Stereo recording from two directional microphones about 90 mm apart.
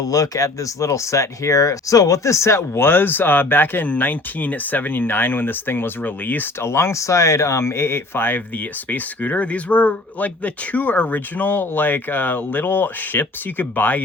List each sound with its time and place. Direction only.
0.0 s speech: 40° left (ahead or behind); by 14.0 s 20° left (ahead or behind)